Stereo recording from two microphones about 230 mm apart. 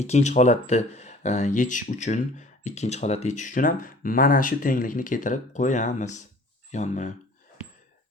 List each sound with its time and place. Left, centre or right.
0.0 s speech: left